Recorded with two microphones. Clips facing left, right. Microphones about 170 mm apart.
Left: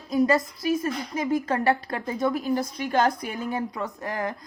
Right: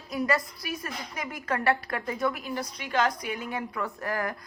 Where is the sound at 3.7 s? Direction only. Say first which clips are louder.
Even; 20° left (ahead or behind).